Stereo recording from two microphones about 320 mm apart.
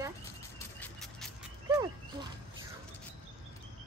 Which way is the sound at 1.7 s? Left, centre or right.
Centre.